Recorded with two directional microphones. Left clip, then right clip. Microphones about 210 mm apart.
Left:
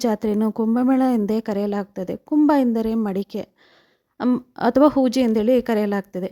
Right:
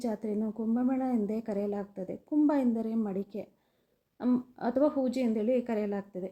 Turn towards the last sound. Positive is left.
turn(degrees=45)  # may be behind; listen again after turning